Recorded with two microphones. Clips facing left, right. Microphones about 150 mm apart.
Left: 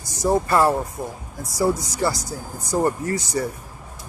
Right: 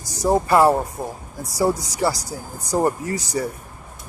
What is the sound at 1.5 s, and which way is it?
Speech, 30° right (ahead or behind).